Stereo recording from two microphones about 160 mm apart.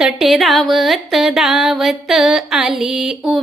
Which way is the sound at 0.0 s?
Centre (ahead or behind).